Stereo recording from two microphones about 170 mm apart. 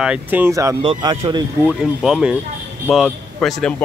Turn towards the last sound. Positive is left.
turn(degrees=5)  # may be behind; listen again after turning